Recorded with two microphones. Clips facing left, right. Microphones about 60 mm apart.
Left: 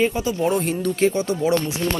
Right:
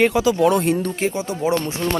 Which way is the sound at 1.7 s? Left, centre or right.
Right.